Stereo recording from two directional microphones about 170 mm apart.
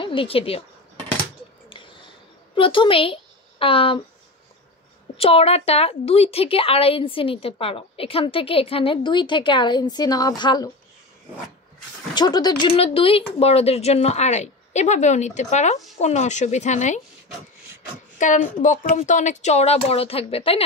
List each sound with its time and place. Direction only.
0.0 s a woman's voice: 30° left (ahead or behind)
2.5 s a woman's voice: 30° left (ahead or behind)
5.1 s a woman's voice: 35° left (ahead or behind)
12.1 s a woman's voice: 25° left (ahead or behind); by 17.0 s 45° left (ahead or behind)
18.2 s a woman's voice: 45° left (ahead or behind)